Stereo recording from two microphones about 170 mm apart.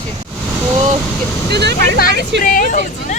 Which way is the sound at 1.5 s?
80° right.